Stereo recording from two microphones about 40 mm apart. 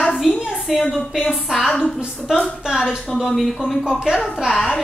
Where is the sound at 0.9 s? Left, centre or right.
Centre.